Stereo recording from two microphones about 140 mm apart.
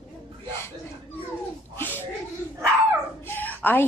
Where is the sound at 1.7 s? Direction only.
15° left (ahead or behind).